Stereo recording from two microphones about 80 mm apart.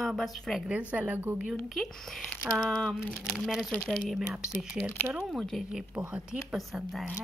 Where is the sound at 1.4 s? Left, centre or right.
Centre.